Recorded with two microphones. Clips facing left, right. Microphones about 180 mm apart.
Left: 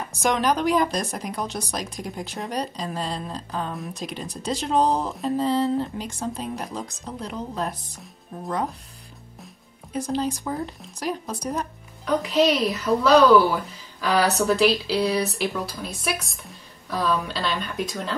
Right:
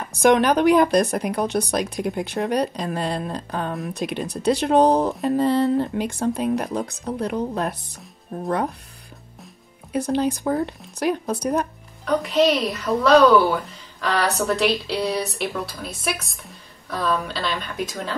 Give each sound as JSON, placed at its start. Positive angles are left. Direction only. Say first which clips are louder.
{"t": 0.2, "sound": "speech", "louder": "right 6 dB", "side_deg": -60}
{"t": 9.9, "sound": "speech", "louder": "right 4 dB", "side_deg": -60}
{"t": 12.0, "sound": "speech", "louder": "right 2 dB", "side_deg": 0}